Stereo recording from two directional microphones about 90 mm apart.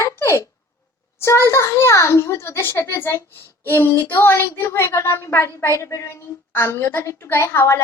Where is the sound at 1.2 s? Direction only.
30° left (ahead or behind).